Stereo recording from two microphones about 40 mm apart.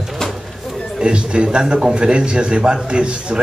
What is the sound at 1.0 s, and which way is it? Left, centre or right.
A man's voice, right.